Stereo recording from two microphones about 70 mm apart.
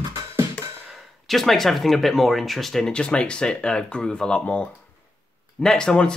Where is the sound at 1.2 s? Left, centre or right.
Centre.